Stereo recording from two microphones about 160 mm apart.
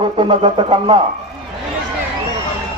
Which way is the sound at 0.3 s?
35° right (ahead or behind).